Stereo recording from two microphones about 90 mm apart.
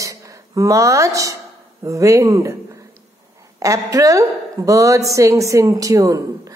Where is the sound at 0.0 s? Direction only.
35° right (ahead or behind).